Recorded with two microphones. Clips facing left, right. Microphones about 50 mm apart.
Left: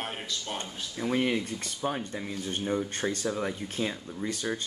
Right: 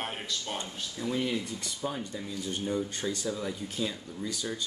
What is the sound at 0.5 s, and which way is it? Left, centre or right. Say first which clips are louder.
Speech: left 1 dB; left.